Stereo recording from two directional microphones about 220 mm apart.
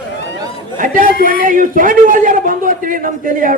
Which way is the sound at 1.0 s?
40° left (ahead or behind).